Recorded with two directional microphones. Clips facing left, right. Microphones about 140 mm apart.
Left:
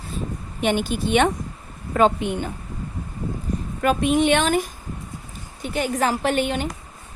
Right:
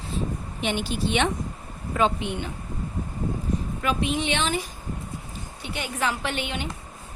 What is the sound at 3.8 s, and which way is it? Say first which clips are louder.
Speech: left 9 dB; 50° left (ahead or behind).